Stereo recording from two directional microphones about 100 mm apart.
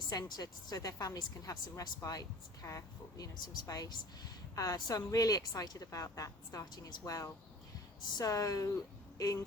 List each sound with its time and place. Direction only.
0.1 s speech: 40° left (ahead or behind)